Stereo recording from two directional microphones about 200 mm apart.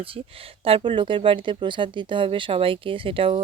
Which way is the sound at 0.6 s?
25° right (ahead or behind).